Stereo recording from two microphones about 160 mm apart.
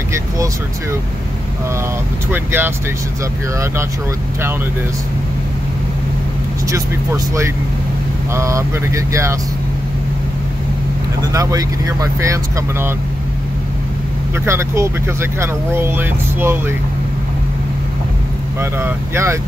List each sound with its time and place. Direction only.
2.3 s speech: 15° right (ahead or behind)
6.7 s speech: 15° right (ahead or behind)
11.3 s speech: 20° right (ahead or behind)
14.4 s speech: 15° right (ahead or behind)
18.6 s speech: 15° right (ahead or behind)